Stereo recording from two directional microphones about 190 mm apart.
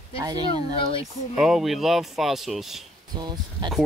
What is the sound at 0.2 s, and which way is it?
Speech, 20° right (ahead or behind).